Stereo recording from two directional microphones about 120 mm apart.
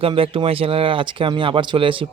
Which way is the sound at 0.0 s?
45° right (ahead or behind).